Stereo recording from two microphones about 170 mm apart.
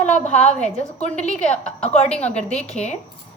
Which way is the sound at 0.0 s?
45° left (ahead or behind).